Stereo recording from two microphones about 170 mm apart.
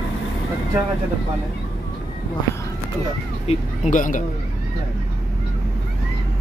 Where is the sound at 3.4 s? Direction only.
45° left (ahead or behind).